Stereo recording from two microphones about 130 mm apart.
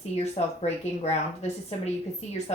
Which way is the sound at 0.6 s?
55° left (ahead or behind).